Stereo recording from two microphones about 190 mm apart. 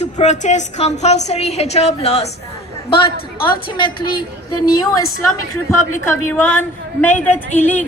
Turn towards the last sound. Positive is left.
turn(degrees=10)  # may be behind; listen again after turning